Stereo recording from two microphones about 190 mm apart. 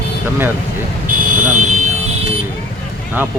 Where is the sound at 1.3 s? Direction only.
40° right (ahead or behind).